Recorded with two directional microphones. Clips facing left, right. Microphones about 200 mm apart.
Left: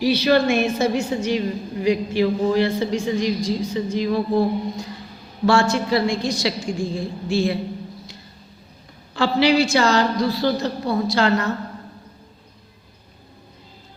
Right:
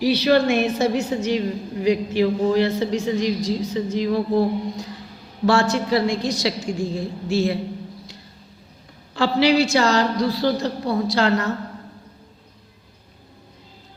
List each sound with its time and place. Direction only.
0.0 s a woman's voice: 35° right (ahead or behind)
9.1 s a woman's voice: 40° right (ahead or behind)